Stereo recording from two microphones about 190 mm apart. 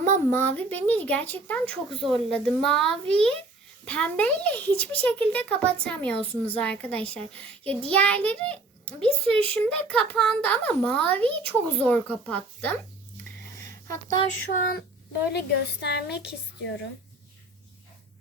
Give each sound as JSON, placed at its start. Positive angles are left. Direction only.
{"t": 0.3, "sound": "speech", "side_deg": 10}
{"t": 14.5, "sound": "speech", "side_deg": 45}
{"t": 15.3, "sound": "a woman's voice", "side_deg": 60}